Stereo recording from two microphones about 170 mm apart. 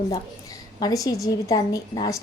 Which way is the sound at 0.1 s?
20° left (ahead or behind).